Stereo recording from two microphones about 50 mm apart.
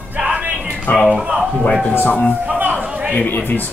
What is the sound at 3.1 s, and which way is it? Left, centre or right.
Speech, left.